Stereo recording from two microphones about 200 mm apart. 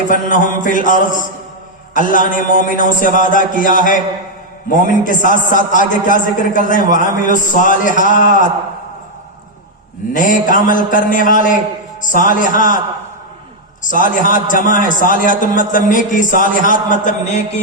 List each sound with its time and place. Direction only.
0.1 s a man's voice: 40° left (ahead or behind)
10.1 s a man's voice: 40° left (ahead or behind)
13.8 s a man's voice: 40° left (ahead or behind)